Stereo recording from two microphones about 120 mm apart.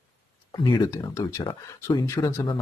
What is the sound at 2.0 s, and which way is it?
Speech, 25° left (ahead or behind).